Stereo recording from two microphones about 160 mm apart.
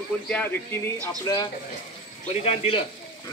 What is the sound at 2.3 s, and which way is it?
Speech, 40° left (ahead or behind).